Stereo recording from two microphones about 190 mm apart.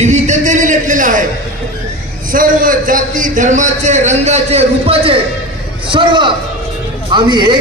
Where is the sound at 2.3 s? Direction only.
45° right (ahead or behind).